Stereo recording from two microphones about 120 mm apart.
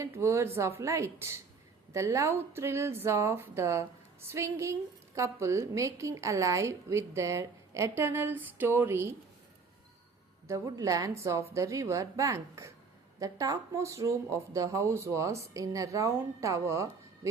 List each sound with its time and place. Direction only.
0.0 s a woman's voice: 25° right (ahead or behind)
10.4 s a woman's voice: 30° right (ahead or behind)